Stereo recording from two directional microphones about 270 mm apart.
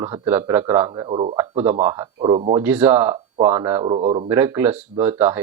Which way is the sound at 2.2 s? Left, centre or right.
Right.